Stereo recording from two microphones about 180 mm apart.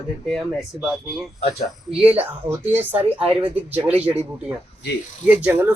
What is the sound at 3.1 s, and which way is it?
Speech, 30° right (ahead or behind).